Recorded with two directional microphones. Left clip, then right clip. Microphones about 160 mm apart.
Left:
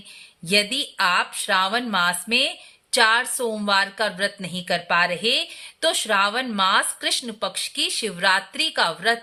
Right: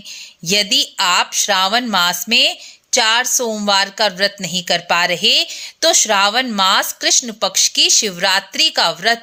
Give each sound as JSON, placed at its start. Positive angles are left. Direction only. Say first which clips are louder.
{"t": 0.4, "sound": "speech", "louder": "right 6 dB", "side_deg": -30}